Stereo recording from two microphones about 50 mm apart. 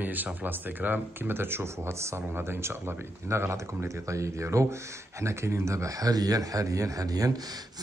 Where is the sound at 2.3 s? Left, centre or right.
Right.